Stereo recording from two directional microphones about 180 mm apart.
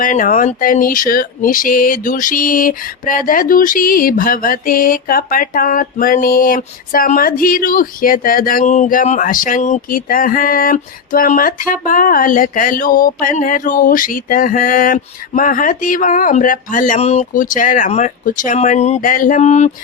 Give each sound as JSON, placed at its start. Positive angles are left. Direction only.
{"t": 0.0, "sound": "speech", "side_deg": 45}